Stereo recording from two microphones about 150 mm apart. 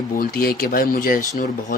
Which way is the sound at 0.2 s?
85° left.